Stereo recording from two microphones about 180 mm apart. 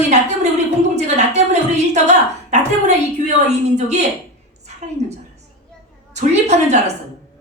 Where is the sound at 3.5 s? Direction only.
40° right (ahead or behind).